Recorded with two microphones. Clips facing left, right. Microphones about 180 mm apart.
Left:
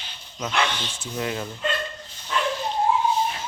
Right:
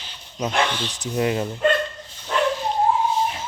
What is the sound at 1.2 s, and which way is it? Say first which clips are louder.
Speech: right 7 dB; 25° right (ahead or behind).